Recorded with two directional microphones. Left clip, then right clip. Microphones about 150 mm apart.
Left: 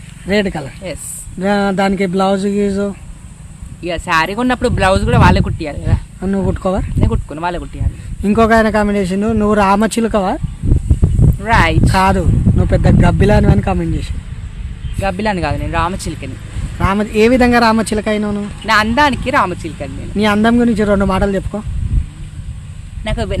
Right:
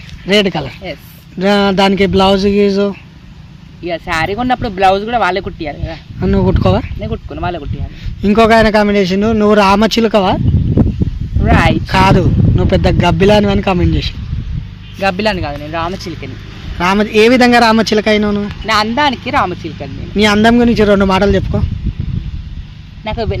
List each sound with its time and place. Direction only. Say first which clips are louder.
0.3 s speech: right 4 dB; 20° right (ahead or behind)
3.8 s speech: left 1 dB; 30° left (ahead or behind)
6.1 s speech: right 6 dB; 15° right (ahead or behind)
7.0 s speech: left 1 dB; 35° left (ahead or behind)
8.2 s speech: right 3 dB; 5° right (ahead or behind)
11.4 s speech: right 1 dB; 25° left (ahead or behind)
11.9 s speech: right 2 dB; 10° right (ahead or behind)
15.7 s speech: left 1 dB; 25° left (ahead or behind)
16.7 s speech: right 4 dB; 15° right (ahead or behind)
18.6 s speech: left 1 dB; 15° left (ahead or behind)
20.1 s speech: right 3 dB; 15° right (ahead or behind)
23.0 s speech: right 2 dB; 10° left (ahead or behind)